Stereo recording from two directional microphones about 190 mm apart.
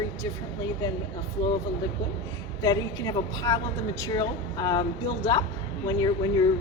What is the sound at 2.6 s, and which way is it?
A woman's voice, 20° left (ahead or behind).